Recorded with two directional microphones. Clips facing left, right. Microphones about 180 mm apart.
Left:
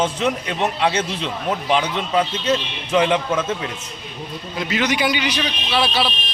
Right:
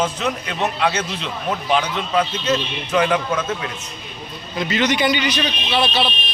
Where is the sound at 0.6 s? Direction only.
25° left (ahead or behind).